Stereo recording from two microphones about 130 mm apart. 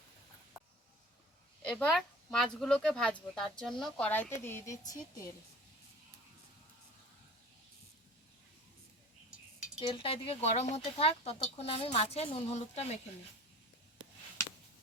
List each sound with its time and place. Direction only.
1.6 s speech: 5° left (ahead or behind); by 5.3 s 25° left (ahead or behind)
9.8 s speech: 40° left (ahead or behind)